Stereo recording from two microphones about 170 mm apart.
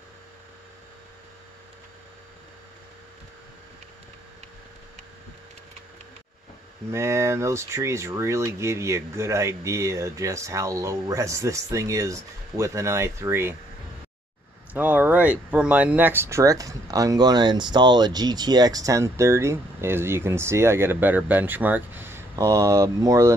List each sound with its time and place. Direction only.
6.9 s speech: 15° right (ahead or behind)
14.7 s speech: 10° right (ahead or behind)